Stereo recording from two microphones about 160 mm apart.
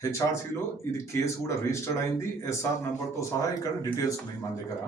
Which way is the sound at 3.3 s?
20° left (ahead or behind).